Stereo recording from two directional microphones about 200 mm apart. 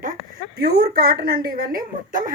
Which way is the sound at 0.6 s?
50° right (ahead or behind).